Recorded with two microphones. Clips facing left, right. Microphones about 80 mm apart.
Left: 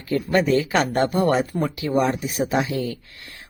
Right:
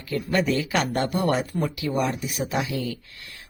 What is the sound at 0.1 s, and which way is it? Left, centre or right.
Speech, left.